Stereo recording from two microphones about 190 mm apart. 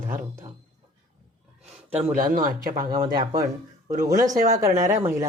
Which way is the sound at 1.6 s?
30° right (ahead or behind).